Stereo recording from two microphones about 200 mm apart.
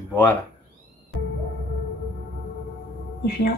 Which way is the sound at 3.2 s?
55° left (ahead or behind).